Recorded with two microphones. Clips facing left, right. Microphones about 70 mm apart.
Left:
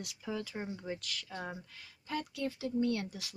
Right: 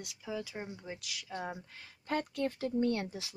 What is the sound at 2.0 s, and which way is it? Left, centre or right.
Speech, right.